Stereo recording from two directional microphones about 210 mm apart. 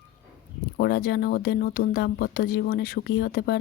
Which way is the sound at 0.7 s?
50° left (ahead or behind).